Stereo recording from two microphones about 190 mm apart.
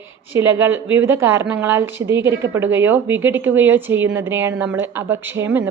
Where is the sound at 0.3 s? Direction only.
10° right (ahead or behind).